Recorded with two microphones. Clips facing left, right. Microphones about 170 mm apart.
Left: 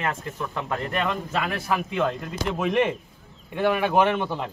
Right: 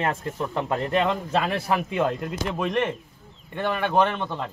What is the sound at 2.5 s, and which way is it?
A man's voice, 5° left (ahead or behind).